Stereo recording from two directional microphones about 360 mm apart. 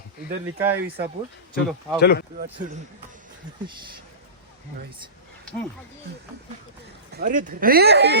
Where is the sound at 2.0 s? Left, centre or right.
Left.